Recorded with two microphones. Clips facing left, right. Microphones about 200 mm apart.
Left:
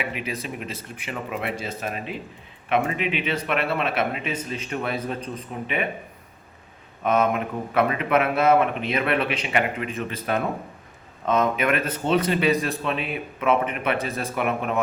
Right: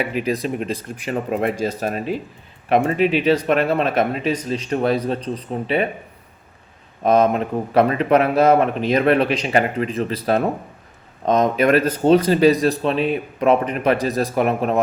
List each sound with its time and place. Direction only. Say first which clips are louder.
0.0 s speech: right 8 dB; 40° right (ahead or behind)
7.0 s speech: right 6 dB; 35° right (ahead or behind)